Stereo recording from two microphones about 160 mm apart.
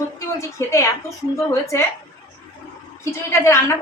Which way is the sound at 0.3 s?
20° left (ahead or behind).